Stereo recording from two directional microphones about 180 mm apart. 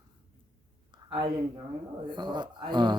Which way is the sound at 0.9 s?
30° right (ahead or behind).